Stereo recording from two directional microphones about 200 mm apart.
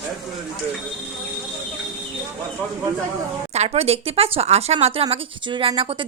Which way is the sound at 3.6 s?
30° right (ahead or behind).